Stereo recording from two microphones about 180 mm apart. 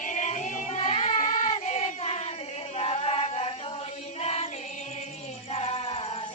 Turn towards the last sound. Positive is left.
turn(degrees=35)  # may be behind; listen again after turning